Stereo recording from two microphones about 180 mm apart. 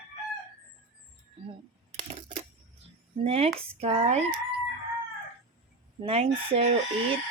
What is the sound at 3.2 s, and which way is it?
Chicken, 35° right (ahead or behind).